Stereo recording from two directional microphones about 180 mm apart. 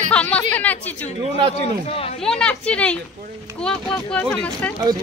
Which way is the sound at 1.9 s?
35° left (ahead or behind).